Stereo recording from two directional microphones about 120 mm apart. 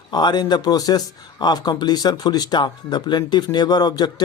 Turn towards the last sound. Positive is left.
turn(degrees=35)  # may be behind; listen again after turning